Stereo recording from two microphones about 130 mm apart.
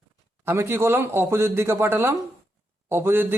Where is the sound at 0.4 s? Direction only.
20° right (ahead or behind).